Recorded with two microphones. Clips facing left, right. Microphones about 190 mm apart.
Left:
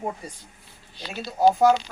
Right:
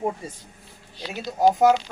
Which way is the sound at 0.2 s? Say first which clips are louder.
Right 3 dB; 25° right (ahead or behind).